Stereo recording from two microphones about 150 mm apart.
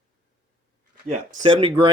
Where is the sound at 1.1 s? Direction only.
55° right (ahead or behind).